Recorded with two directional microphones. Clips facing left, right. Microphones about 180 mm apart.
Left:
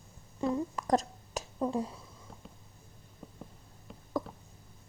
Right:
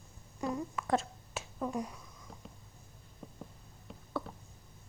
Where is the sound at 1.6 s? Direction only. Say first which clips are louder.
Left 4 dB; 30° left (ahead or behind).